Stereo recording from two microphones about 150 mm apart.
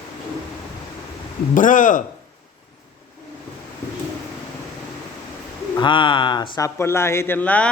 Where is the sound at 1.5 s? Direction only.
60° left (ahead or behind).